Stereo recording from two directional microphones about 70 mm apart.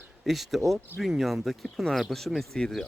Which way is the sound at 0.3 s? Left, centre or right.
Centre.